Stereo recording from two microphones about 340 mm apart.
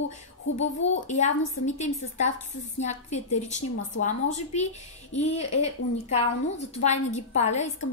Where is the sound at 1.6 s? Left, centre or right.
Left.